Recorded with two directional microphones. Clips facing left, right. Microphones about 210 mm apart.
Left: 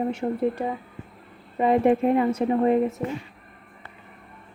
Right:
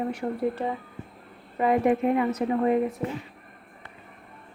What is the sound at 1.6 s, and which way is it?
A woman's voice, 30° left (ahead or behind).